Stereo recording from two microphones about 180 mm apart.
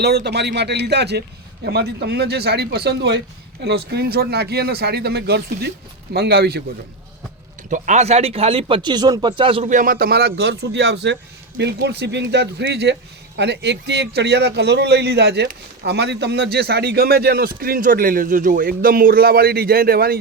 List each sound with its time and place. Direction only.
0.0 s a man's voice: 65° right (ahead or behind)
7.7 s speech: 40° right (ahead or behind)
9.6 s a man's voice: 50° right (ahead or behind)